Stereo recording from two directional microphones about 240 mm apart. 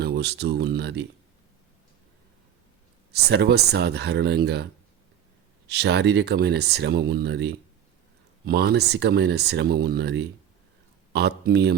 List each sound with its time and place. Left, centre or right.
0.0 s speech: right
3.1 s speech: right